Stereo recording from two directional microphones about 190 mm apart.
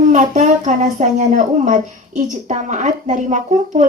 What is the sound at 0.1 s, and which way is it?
A woman's voice, 40° right (ahead or behind).